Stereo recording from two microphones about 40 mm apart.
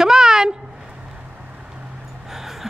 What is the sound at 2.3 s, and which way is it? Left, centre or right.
Music, centre.